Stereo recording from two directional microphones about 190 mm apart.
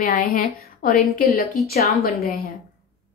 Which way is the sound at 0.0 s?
50° left (ahead or behind).